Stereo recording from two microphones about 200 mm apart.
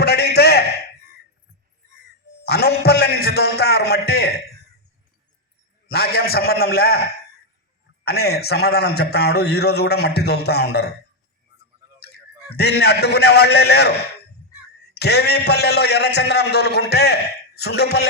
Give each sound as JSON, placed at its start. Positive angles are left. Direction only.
{"t": 0.0, "sound": "a sound", "side_deg": 55}
{"t": 2.4, "sound": "a man's voice", "side_deg": 50}
{"t": 5.9, "sound": "a man's voice", "side_deg": 50}
{"t": 8.0, "sound": "a man's voice", "side_deg": 55}
{"t": 12.5, "sound": "a man's voice", "side_deg": 55}
{"t": 14.9, "sound": "a man's voice", "side_deg": 55}